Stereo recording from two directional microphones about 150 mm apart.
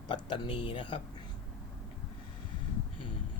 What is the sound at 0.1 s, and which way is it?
Speech, 35° left (ahead or behind).